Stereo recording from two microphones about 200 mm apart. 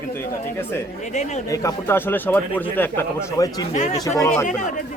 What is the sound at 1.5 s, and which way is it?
Speech, 15° left (ahead or behind).